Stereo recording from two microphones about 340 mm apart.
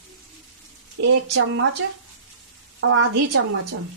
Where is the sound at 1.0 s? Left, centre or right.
Right.